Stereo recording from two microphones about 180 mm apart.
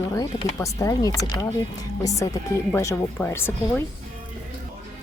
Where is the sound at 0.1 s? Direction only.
20° left (ahead or behind).